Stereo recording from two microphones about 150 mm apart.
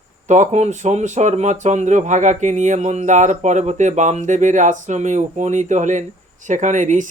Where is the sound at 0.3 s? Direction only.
50° right (ahead or behind).